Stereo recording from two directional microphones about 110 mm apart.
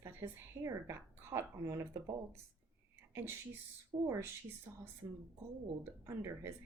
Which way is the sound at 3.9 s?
45° right (ahead or behind).